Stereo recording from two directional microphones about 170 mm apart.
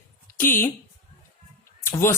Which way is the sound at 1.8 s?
15° left (ahead or behind).